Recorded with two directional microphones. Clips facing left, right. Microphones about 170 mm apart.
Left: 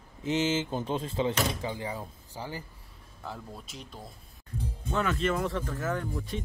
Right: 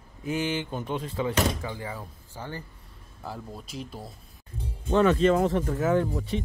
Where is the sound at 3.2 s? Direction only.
Centre (ahead or behind).